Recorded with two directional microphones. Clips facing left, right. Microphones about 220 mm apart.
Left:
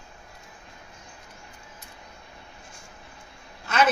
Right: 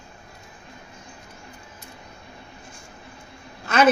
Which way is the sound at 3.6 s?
45° right (ahead or behind).